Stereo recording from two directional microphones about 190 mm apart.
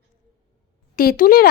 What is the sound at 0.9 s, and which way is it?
Speech, 50° left (ahead or behind).